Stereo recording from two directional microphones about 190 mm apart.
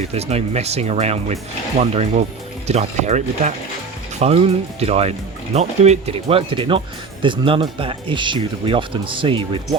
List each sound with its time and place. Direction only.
0.0 s speech: 35° right (ahead or behind)